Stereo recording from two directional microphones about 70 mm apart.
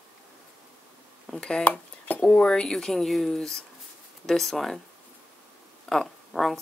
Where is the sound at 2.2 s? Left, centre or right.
Centre.